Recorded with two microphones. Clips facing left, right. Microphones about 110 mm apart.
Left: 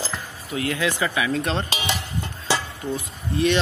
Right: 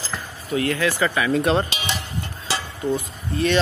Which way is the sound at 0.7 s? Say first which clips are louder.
Right 2 dB; 15° left (ahead or behind).